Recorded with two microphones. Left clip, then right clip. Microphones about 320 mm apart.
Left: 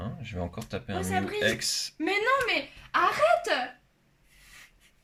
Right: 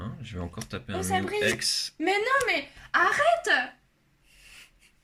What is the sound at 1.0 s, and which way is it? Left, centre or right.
Speech, centre.